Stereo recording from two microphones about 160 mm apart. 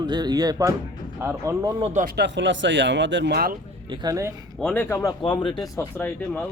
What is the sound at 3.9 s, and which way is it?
Speech, 25° right (ahead or behind).